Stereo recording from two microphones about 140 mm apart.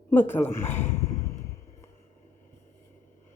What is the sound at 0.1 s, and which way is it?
Speech, 15° left (ahead or behind).